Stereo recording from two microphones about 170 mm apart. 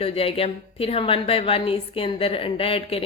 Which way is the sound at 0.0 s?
35° left (ahead or behind).